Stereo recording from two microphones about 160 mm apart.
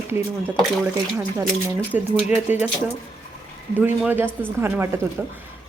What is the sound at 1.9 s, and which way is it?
Speech, 10° right (ahead or behind).